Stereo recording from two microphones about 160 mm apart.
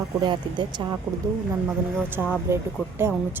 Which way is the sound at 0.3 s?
30° right (ahead or behind).